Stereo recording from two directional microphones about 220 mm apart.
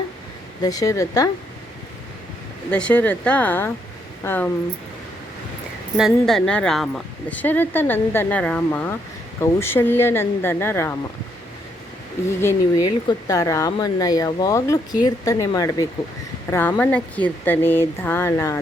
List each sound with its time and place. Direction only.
0.6 s speech: 15° left (ahead or behind)
2.6 s speech: 5° left (ahead or behind)
6.0 s speech: centre (ahead or behind)
12.4 s speech: 15° left (ahead or behind)